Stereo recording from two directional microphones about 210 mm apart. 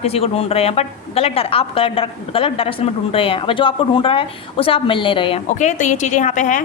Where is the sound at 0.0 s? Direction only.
30° left (ahead or behind).